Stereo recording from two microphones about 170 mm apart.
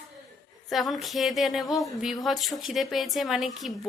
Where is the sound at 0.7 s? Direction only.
Centre (ahead or behind).